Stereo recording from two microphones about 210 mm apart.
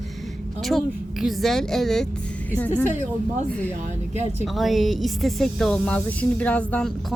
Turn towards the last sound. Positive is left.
turn(degrees=5)  # may be behind; listen again after turning